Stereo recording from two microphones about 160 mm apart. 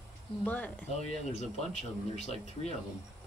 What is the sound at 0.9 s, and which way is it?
Speech, 45° left (ahead or behind).